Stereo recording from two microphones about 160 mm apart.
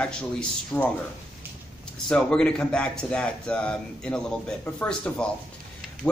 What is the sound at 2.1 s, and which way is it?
Speech, 5° left (ahead or behind).